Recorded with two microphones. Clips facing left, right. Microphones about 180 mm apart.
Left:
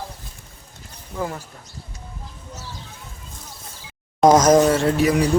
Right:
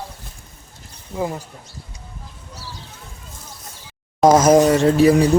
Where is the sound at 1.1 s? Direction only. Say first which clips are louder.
Right 3 dB; 15° right (ahead or behind).